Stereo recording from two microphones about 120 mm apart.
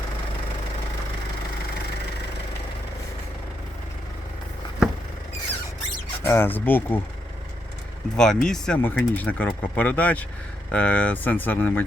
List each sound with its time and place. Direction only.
6.2 s speech: 20° left (ahead or behind)
8.1 s speech: 5° left (ahead or behind)
8.8 s speech: 15° left (ahead or behind)